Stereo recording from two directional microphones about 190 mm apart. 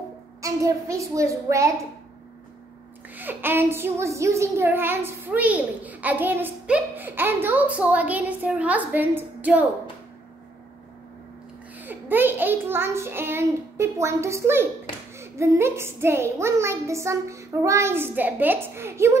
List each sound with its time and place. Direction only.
0.4 s a child's voice: 15° right (ahead or behind)
3.2 s a child's voice: 10° right (ahead or behind)
11.8 s a child's voice: 10° right (ahead or behind)